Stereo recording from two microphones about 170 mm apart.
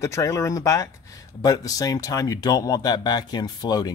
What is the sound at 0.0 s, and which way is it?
Speech, 15° left (ahead or behind).